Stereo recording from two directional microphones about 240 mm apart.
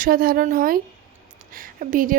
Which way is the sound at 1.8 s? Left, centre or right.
Right.